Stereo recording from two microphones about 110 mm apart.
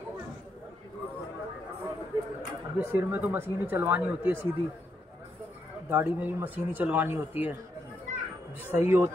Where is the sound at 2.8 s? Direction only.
15° right (ahead or behind).